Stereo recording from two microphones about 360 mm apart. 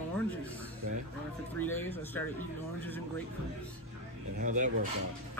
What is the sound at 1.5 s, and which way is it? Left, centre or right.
Speech, centre.